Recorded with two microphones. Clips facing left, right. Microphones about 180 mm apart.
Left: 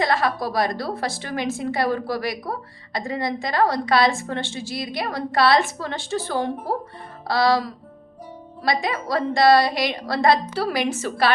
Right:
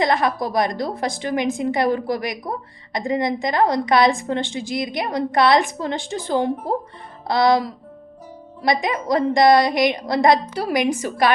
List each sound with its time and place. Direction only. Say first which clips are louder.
0.0 s a woman's voice: right 2 dB; 20° right (ahead or behind)
7.3 s music: right 3 dB; 20° right (ahead or behind)
8.6 s a woman's voice: right 3 dB; 20° right (ahead or behind)